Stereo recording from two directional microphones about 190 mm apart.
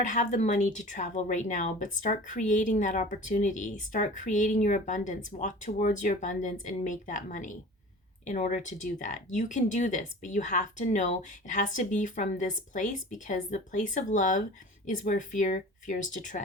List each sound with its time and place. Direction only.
0.0 s speech: 40° left (ahead or behind)